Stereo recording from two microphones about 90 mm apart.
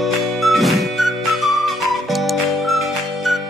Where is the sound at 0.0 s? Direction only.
Centre (ahead or behind).